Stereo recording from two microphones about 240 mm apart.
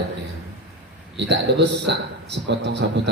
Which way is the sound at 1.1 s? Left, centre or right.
Right.